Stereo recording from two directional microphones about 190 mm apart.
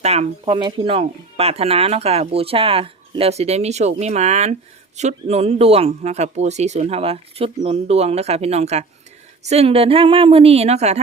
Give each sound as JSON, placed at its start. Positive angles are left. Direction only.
{"t": 0.0, "sound": "speech", "side_deg": -35}